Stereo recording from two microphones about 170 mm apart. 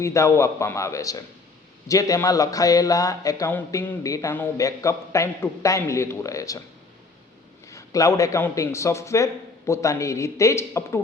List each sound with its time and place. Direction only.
0.0 s a man's voice: 15° left (ahead or behind)
7.7 s a man's voice: 20° left (ahead or behind)